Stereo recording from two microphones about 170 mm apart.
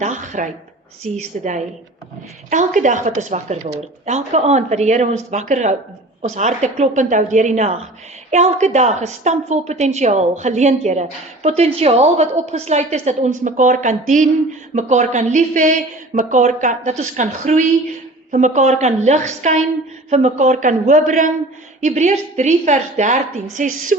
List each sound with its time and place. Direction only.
0.0 s a woman's voice: 45° right (ahead or behind)
2.5 s a woman's voice: 45° right (ahead or behind)